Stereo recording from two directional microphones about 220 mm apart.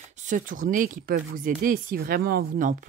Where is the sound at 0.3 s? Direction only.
35° right (ahead or behind).